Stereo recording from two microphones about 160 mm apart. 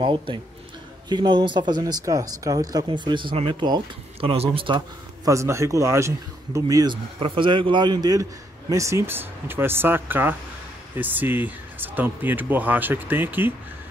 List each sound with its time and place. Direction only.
0.0 s speech: 30° right (ahead or behind)
5.3 s speech: 20° right (ahead or behind)